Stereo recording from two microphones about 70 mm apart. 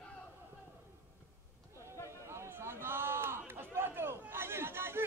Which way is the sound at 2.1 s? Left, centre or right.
Right.